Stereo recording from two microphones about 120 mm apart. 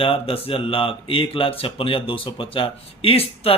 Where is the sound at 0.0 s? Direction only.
50° left (ahead or behind).